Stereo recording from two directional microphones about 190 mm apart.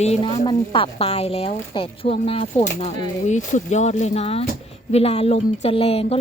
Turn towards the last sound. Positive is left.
turn(degrees=30)  # may be behind; listen again after turning